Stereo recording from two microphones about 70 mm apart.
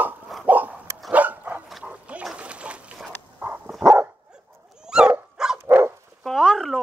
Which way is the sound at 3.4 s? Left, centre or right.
Right.